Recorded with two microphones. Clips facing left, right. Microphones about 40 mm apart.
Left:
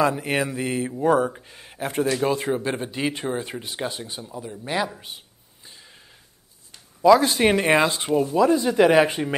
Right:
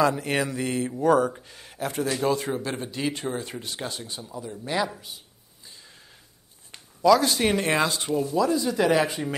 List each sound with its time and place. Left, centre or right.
0.0 s speech: centre
1.8 s speech: left; by 5.0 s centre
5.6 s a sound: left
7.0 s speech: left